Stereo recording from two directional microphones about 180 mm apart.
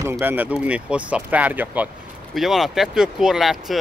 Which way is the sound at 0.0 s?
15° right (ahead or behind).